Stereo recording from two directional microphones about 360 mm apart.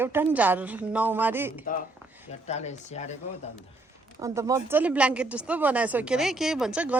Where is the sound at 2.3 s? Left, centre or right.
Centre.